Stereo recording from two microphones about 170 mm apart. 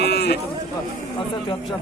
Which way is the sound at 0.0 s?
70° left (ahead or behind).